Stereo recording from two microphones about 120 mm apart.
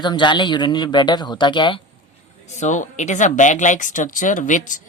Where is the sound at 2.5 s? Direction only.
80° left.